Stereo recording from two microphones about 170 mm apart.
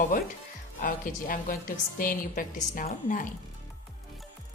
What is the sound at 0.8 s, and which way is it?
A woman's voice, 50° left (ahead or behind).